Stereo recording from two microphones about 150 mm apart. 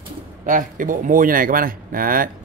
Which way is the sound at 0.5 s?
65° right (ahead or behind).